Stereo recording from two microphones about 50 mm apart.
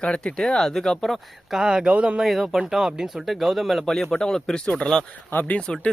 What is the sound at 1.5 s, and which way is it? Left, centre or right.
Speech, centre.